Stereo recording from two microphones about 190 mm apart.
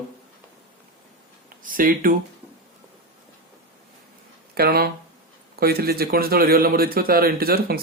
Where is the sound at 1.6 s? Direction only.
45° right (ahead or behind).